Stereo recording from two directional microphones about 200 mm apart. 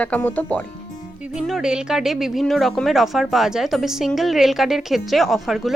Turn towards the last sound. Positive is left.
turn(degrees=0)  # may be behind; listen again after turning